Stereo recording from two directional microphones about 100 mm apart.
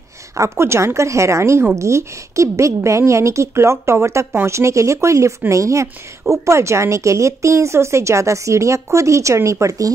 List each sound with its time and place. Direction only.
0.4 s a woman's voice: 25° right (ahead or behind)